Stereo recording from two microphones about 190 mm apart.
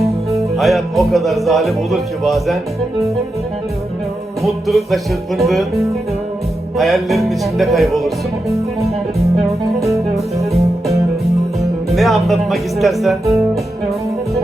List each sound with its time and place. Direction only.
0.3 s speech: centre (ahead or behind)
4.4 s speech: centre (ahead or behind)
9.8 s music: 15° right (ahead or behind)
11.6 s speech: centre (ahead or behind)